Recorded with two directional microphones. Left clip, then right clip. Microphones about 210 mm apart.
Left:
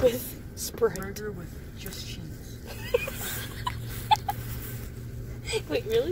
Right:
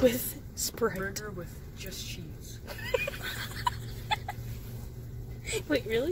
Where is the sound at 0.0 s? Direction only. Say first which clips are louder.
Left 2 dB; 35° right (ahead or behind).